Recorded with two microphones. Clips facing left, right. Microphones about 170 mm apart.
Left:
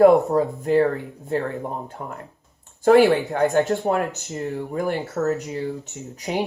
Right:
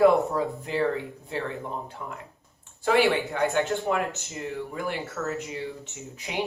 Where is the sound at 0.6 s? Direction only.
45° left (ahead or behind).